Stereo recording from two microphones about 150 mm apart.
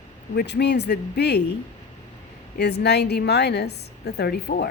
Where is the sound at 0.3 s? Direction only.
90° left.